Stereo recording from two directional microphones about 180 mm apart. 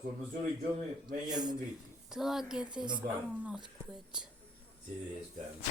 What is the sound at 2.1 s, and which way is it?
Speech, centre (ahead or behind).